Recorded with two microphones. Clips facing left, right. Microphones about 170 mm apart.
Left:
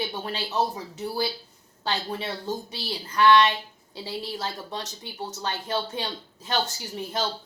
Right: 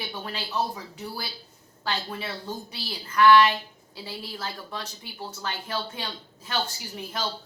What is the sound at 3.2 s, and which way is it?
Speech, 20° left (ahead or behind).